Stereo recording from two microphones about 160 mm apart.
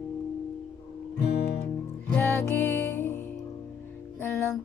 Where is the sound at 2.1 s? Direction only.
15° left (ahead or behind).